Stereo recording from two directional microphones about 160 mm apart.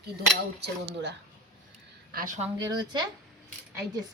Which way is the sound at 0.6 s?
90° right.